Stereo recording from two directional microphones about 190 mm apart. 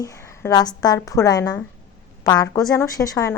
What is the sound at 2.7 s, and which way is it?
Speech, 20° left (ahead or behind).